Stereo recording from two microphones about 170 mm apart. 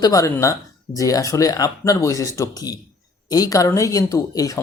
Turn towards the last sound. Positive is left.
turn(degrees=20)  # may be behind; listen again after turning